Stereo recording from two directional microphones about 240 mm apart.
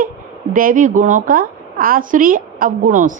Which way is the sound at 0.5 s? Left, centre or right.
Right.